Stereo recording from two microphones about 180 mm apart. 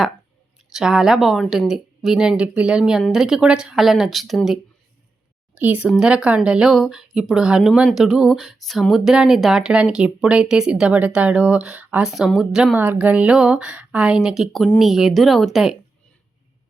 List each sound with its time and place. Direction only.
0.7 s speech: centre (ahead or behind)